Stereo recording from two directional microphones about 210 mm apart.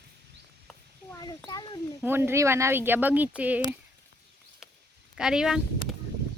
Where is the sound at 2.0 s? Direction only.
10° right (ahead or behind).